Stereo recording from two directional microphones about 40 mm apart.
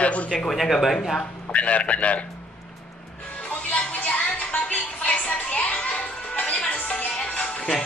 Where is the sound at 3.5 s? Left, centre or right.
Left.